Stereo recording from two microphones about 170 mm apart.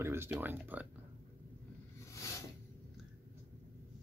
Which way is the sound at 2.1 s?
20° left (ahead or behind).